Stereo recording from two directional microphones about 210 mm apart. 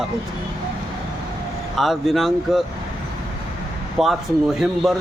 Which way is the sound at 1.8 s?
Centre (ahead or behind).